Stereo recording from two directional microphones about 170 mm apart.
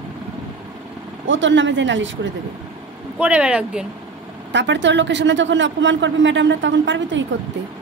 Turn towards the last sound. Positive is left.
turn(degrees=-90)